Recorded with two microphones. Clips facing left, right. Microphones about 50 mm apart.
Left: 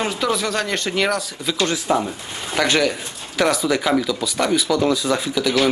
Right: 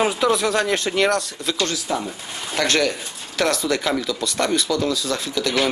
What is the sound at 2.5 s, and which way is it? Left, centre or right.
Speech, centre.